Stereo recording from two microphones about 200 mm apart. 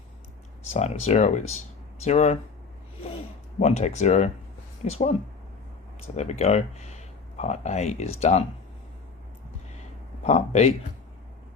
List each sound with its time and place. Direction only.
0.6 s speech: 35° left (ahead or behind)
3.6 s speech: 35° left (ahead or behind)
6.1 s speech: 35° left (ahead or behind)
10.2 s speech: 35° left (ahead or behind)